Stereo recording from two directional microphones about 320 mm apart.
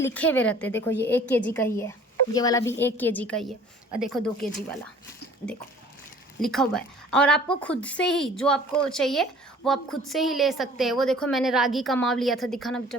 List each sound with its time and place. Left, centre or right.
0.0 s a woman's voice: centre
6.4 s a woman's voice: centre